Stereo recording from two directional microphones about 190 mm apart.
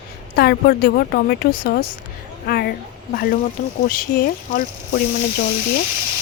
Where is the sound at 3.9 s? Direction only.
50° left (ahead or behind).